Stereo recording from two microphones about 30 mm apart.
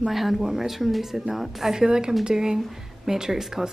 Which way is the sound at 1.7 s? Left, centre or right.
Right.